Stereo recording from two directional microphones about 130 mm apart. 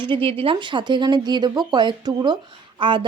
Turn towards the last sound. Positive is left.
turn(degrees=-40)  # may be behind; listen again after turning